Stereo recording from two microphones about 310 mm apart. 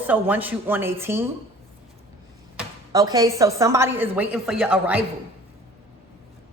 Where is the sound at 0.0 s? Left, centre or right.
Centre.